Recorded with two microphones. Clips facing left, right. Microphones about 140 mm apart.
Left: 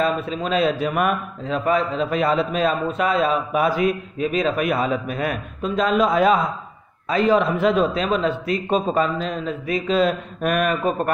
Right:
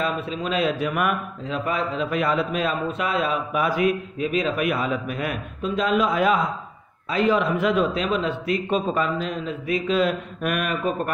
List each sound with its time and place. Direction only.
0.0 s a man's voice: 40° left (ahead or behind)